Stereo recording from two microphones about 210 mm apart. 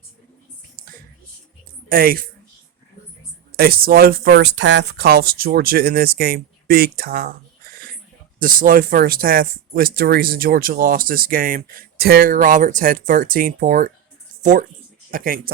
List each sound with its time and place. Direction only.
1.9 s speech: 45° right (ahead or behind)
3.6 s speech: 45° right (ahead or behind)
15.1 s speech: 40° right (ahead or behind)